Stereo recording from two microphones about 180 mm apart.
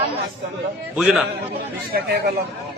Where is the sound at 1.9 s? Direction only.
60° right (ahead or behind).